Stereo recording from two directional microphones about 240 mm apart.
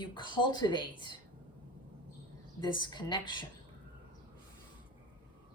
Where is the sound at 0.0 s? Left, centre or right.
Centre.